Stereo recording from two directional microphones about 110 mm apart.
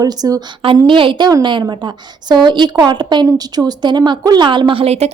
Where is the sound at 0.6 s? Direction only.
55° right (ahead or behind).